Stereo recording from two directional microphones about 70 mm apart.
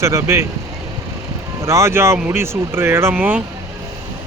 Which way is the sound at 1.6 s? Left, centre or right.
Right.